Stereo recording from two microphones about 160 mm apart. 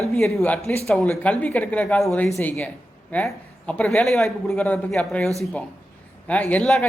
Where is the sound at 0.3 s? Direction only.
5° left (ahead or behind).